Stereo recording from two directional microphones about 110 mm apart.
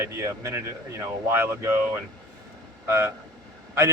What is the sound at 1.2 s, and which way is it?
Speech, 25° right (ahead or behind).